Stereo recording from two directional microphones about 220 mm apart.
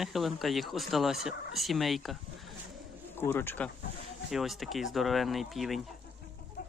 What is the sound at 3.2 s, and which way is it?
Speech, 10° left (ahead or behind).